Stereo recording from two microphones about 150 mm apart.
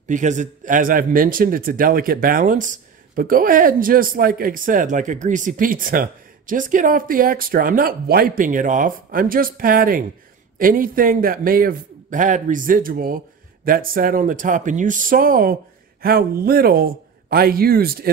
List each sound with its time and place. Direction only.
0.1 s a man's voice: 55° right (ahead or behind); by 15.5 s 70° right (ahead or behind)
16.0 s a man's voice: 85° right